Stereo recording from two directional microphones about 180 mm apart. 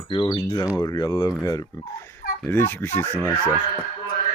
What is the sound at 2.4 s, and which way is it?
Fowl, 15° left (ahead or behind).